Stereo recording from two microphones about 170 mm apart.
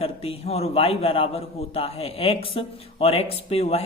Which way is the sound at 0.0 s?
35° left (ahead or behind).